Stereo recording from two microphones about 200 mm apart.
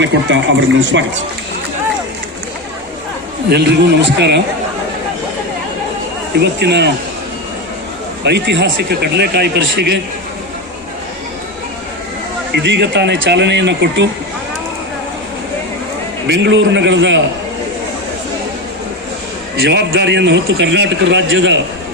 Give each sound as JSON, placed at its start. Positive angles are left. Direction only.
{"t": 0.0, "sound": "speech", "side_deg": -65}
{"t": 3.5, "sound": "a man's voice", "side_deg": -55}
{"t": 6.4, "sound": "a man's voice", "side_deg": -55}
{"t": 8.2, "sound": "a man's voice", "side_deg": -55}
{"t": 12.5, "sound": "a man's voice", "side_deg": -60}
{"t": 16.2, "sound": "a man's voice", "side_deg": -65}
{"t": 19.6, "sound": "a man's voice", "side_deg": -60}